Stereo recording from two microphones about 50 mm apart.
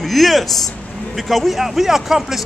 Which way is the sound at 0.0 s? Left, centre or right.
Centre.